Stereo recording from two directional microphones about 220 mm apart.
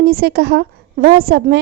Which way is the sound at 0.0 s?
45° right (ahead or behind).